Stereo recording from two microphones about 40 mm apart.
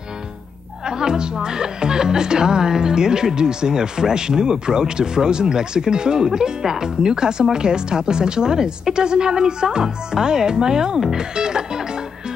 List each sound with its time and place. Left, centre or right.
0.8 s speech: centre